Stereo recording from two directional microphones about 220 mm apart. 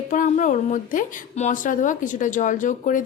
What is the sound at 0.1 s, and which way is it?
Speech, 35° left (ahead or behind).